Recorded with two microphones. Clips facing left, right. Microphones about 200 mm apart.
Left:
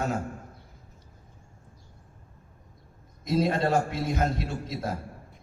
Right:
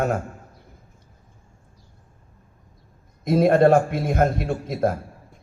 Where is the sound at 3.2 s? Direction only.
55° right (ahead or behind).